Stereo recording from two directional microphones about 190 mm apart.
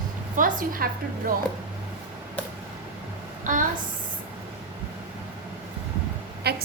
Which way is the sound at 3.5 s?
45° right (ahead or behind).